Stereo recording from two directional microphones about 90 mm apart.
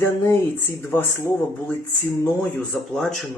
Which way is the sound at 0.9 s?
25° left (ahead or behind).